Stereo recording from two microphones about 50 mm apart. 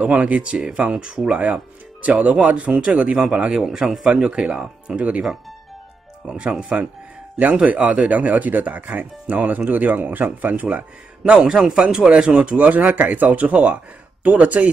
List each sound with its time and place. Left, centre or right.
0.0 s speech: right
1.4 s a man's voice: right; by 4.1 s centre
4.1 s speech: right
6.2 s a man's voice: centre
7.6 s speech: right
11.3 s a man's voice: centre
12.1 s speech: right